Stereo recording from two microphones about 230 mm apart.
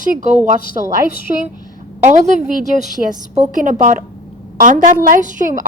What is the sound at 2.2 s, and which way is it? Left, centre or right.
A woman's voice, right.